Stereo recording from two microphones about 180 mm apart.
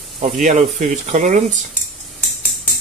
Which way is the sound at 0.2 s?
45° right (ahead or behind).